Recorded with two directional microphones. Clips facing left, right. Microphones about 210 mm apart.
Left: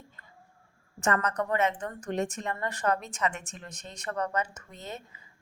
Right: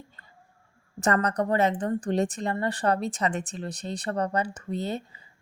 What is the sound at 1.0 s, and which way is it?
A woman's voice, 35° right (ahead or behind).